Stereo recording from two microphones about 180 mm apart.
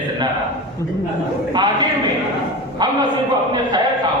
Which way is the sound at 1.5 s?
25° right (ahead or behind).